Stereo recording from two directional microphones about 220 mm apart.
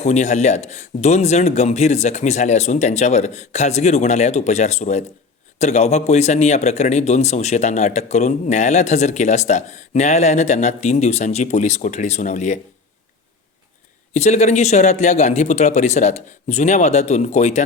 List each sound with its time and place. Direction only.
0.0 s a man's voice: 30° left (ahead or behind)
14.1 s a man's voice: 30° left (ahead or behind)